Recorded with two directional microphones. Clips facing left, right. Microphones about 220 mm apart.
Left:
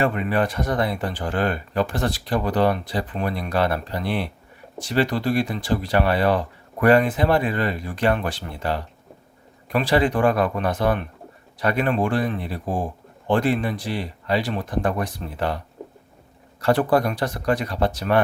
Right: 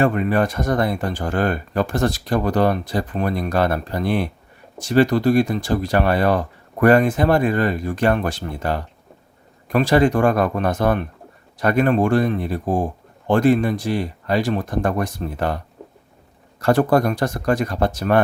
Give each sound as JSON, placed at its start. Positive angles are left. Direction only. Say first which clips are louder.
{"t": 0.0, "sound": "speech", "louder": "right 4 dB", "side_deg": -45}
{"t": 15.8, "sound": "a sound", "louder": "left 3 dB", "side_deg": 0}
{"t": 16.6, "sound": "speech", "louder": "right 3 dB", "side_deg": -45}